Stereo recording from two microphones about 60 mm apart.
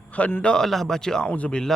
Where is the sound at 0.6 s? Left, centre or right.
Centre.